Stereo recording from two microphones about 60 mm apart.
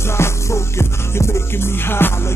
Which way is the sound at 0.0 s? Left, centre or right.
Left.